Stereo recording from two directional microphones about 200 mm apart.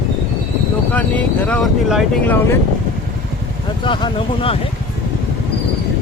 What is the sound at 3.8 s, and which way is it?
Speech, 25° left (ahead or behind).